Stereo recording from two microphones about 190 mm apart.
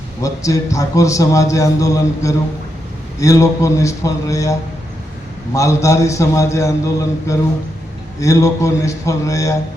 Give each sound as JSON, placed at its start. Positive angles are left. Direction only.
{"t": 0.2, "sound": "a man's voice", "side_deg": 15}
{"t": 5.5, "sound": "a man's voice", "side_deg": 15}